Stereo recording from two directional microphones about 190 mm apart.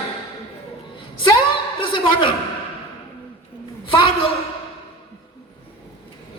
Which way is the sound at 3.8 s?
25° left (ahead or behind).